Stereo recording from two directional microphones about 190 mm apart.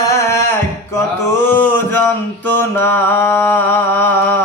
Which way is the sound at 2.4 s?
10° left (ahead or behind).